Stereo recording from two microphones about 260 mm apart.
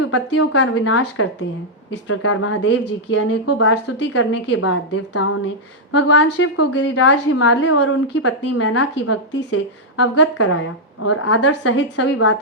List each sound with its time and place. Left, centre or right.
0.3 s a woman's voice: left
6.1 s a woman's voice: left